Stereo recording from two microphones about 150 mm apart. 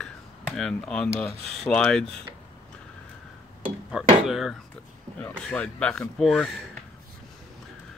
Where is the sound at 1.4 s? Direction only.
Centre (ahead or behind).